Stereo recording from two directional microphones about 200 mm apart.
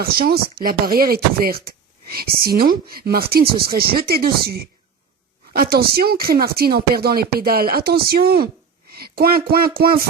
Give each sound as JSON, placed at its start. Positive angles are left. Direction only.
{"t": 0.0, "sound": "speech", "side_deg": -50}